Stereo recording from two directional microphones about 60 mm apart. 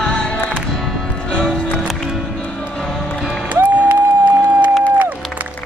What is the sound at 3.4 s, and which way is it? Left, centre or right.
Music, right.